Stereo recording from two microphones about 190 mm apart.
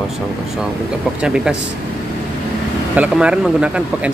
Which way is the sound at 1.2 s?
5° right (ahead or behind).